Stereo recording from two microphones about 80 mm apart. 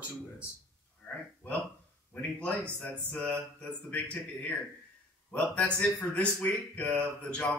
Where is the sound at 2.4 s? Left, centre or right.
Centre.